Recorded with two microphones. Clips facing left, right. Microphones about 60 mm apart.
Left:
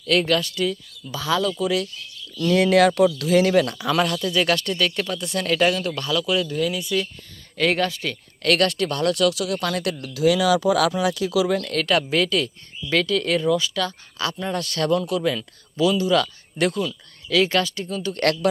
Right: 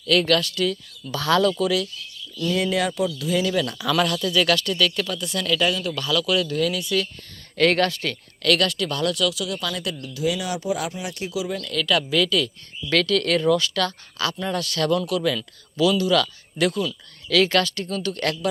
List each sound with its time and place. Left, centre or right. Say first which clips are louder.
0.1 s speech: even; left
1.1 s speech: right 3 dB; centre
2.5 s speech: left 7 dB; left
6.1 s speech: right 1 dB; left
8.4 s speech: left 1 dB; left
10.0 s speech: left 7 dB; left
11.4 s speech: left 6 dB; left
11.7 s speech: left 1 dB; left
12.9 s speech: even; centre
16.6 s speech: even; left
17.2 s speech: right 1 dB; centre